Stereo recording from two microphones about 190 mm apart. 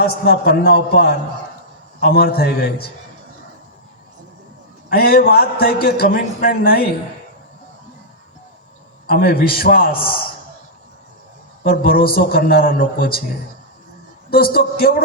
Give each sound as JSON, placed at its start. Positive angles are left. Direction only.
{"t": 0.0, "sound": "a man's voice", "side_deg": 55}
{"t": 4.9, "sound": "a man's voice", "side_deg": 55}
{"t": 9.0, "sound": "a man's voice", "side_deg": 50}
{"t": 11.6, "sound": "a man's voice", "side_deg": 50}
{"t": 14.3, "sound": "a man's voice", "side_deg": 50}